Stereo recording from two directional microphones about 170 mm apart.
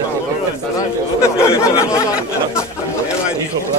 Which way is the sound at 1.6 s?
15° left (ahead or behind).